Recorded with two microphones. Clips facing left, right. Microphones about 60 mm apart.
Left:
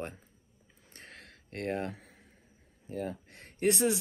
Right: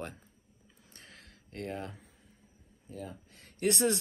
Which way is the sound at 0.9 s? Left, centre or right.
Left.